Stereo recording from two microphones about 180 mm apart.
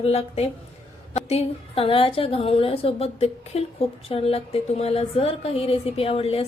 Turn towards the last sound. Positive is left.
turn(degrees=35)  # may be behind; listen again after turning